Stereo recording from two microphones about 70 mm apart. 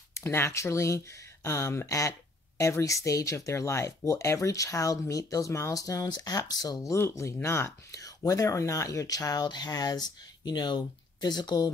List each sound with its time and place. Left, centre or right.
0.2 s speech: left
6.0 s speech: left
6.8 s speech: left